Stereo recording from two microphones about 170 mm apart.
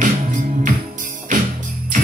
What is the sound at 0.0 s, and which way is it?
Music, 50° right (ahead or behind).